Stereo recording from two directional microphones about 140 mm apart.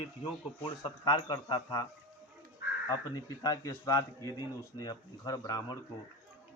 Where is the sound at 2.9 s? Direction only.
25° left (ahead or behind).